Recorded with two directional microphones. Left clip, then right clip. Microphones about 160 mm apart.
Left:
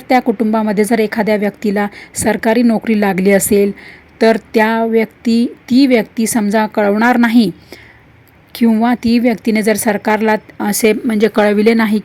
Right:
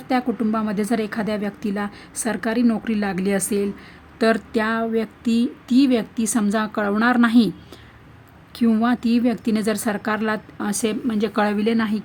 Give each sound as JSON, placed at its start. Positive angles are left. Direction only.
{"t": 0.1, "sound": "a woman's voice", "side_deg": 20}